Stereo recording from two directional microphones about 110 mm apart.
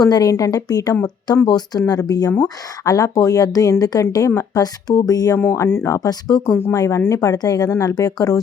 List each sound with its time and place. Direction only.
0.0 s speech: 35° left (ahead or behind)
5.4 s speech: 20° left (ahead or behind)
6.1 s speech: 35° left (ahead or behind)